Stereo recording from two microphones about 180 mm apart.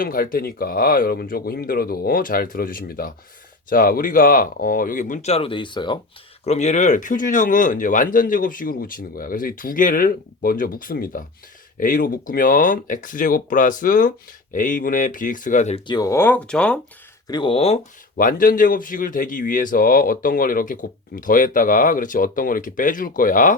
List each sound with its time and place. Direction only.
0.0 s speech: 50° left (ahead or behind); by 6.0 s 25° left (ahead or behind)
6.4 s speech: 35° left (ahead or behind)
15.9 s speech: 20° left (ahead or behind)
17.2 s speech: 25° left (ahead or behind)
18.2 s speech: 50° left (ahead or behind)